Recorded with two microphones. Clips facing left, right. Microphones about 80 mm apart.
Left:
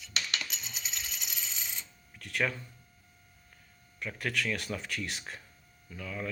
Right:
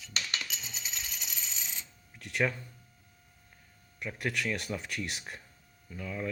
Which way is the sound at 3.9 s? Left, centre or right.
Centre.